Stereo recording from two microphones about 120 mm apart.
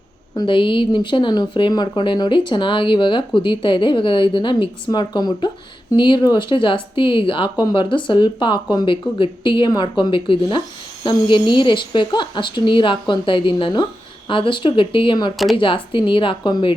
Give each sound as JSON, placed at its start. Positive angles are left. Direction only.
{"t": 0.3, "sound": "speech", "side_deg": 45}